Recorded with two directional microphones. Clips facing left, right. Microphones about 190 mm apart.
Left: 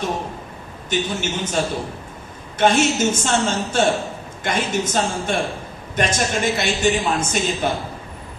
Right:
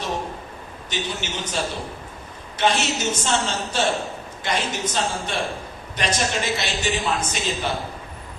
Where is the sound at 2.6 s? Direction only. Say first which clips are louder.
Left 5 dB; 50° left (ahead or behind).